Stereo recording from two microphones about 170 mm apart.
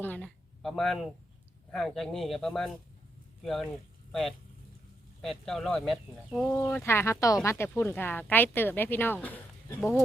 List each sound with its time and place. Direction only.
0.0 s speech: 10° left (ahead or behind)
6.5 s speech: 15° left (ahead or behind)